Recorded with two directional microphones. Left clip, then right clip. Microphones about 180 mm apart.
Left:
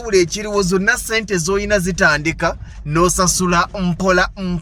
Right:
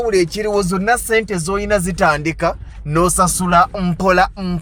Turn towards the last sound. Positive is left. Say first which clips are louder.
# right 2 dB
turn(degrees=0)  # may be behind; listen again after turning